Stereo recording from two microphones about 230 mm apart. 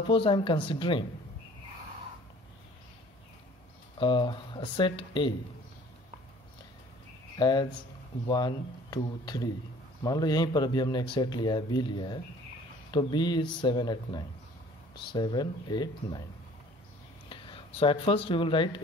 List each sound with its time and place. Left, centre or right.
0.0 s speech: left
4.0 s speech: left
7.3 s speech: centre
17.3 s speech: left